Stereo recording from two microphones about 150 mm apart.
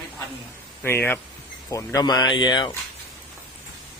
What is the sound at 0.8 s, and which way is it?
Speech, 15° left (ahead or behind).